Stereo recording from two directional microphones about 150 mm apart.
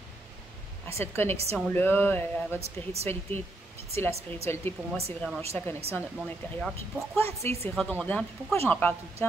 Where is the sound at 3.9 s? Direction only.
20° left (ahead or behind).